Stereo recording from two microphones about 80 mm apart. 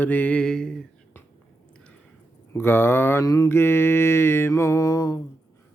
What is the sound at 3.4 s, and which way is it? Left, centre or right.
Mantra, left.